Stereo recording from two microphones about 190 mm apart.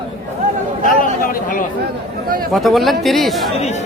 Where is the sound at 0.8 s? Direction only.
50° left (ahead or behind).